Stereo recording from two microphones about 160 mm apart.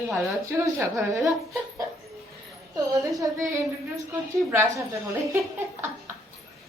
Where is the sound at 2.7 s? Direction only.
20° right (ahead or behind).